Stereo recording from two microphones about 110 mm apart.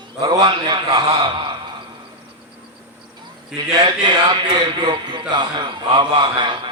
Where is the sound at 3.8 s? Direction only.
45° right (ahead or behind).